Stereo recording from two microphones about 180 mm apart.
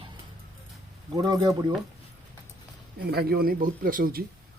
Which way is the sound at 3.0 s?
60° right (ahead or behind).